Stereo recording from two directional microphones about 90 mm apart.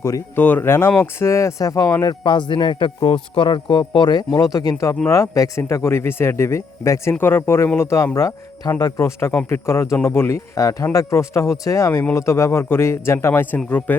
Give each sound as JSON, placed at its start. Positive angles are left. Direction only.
{"t": 0.3, "sound": "speech", "side_deg": 20}
{"t": 2.2, "sound": "speech", "side_deg": 60}
{"t": 9.0, "sound": "a man's voice", "side_deg": 30}
{"t": 10.5, "sound": "a man's voice", "side_deg": 40}